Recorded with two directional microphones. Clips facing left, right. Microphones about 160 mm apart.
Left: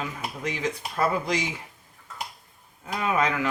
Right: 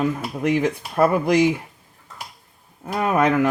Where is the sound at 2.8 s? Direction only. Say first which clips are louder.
Right 6 dB; 50° right (ahead or behind).